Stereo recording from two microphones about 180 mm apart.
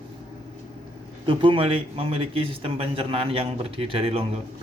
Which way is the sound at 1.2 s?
30° right (ahead or behind).